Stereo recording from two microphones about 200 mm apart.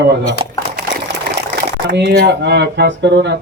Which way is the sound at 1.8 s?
55° right (ahead or behind).